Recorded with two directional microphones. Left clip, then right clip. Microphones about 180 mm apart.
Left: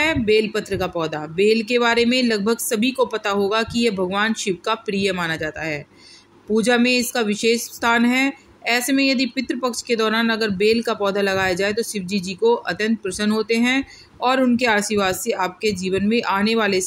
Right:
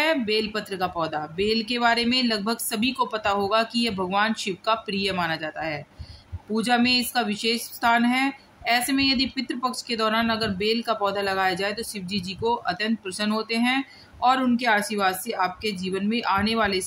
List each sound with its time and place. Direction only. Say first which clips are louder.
0.0 s speech: left 5 dB; 15° left (ahead or behind)